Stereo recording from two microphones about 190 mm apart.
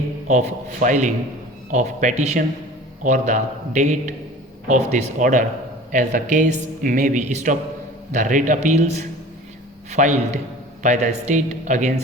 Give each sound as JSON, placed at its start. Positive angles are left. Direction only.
{"t": 0.3, "sound": "speech", "side_deg": -40}